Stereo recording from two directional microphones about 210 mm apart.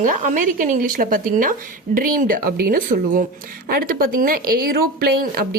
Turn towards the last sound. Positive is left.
turn(degrees=-45)  # may be behind; listen again after turning